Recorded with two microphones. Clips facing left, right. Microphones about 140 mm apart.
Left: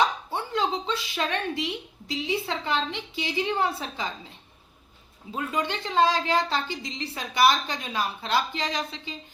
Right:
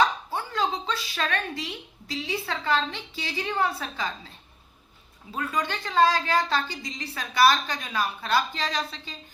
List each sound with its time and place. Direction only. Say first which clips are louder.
0.3 s speech: left 1 dB; 25° left (ahead or behind)
5.3 s speech: left 1 dB; 20° left (ahead or behind)